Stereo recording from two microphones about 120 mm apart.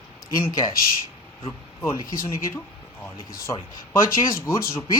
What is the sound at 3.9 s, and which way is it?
Speech, 20° left (ahead or behind).